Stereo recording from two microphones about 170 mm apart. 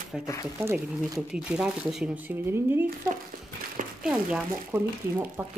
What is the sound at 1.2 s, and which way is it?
Speech, 5° right (ahead or behind).